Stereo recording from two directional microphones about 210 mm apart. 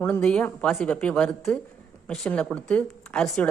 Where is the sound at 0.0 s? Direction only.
5° left (ahead or behind).